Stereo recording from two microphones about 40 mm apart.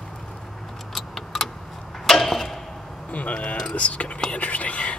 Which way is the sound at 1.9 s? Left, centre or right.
Centre.